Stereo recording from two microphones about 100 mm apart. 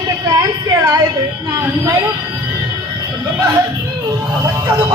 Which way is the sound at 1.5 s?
30° right (ahead or behind).